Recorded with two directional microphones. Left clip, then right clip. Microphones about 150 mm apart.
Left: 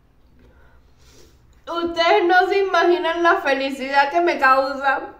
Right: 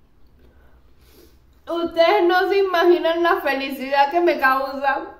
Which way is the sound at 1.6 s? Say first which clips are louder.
Right 2 dB; 20° right (ahead or behind).